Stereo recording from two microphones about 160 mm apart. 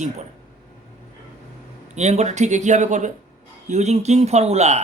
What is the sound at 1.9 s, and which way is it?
Speech, 45° right (ahead or behind).